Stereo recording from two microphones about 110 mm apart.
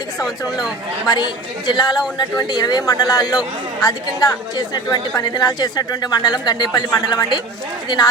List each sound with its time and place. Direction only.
0.2 s speech: 5° right (ahead or behind)
1.6 s speech: 40° left (ahead or behind)